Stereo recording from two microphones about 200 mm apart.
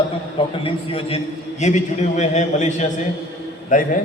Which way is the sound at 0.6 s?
30° left (ahead or behind).